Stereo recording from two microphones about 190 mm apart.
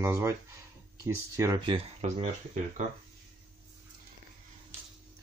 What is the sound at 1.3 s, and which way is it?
Speech, 20° right (ahead or behind).